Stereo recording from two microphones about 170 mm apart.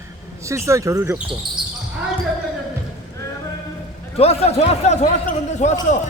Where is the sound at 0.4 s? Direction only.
15° right (ahead or behind).